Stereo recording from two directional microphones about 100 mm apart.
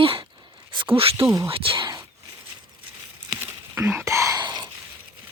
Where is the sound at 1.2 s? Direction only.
35° right (ahead or behind).